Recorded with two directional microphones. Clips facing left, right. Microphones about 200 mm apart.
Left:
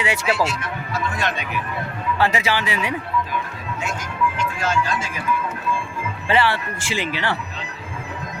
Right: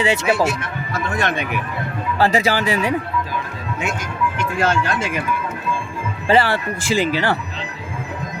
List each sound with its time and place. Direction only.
0.0 s speech: 25° right (ahead or behind)
0.4 s speech: 50° right (ahead or behind)
2.1 s speech: 35° right (ahead or behind)
4.4 s speech: 60° right (ahead or behind)
6.2 s speech: 40° right (ahead or behind)